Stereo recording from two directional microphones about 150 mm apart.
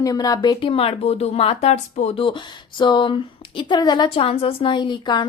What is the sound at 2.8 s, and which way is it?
A woman's voice, 30° left (ahead or behind).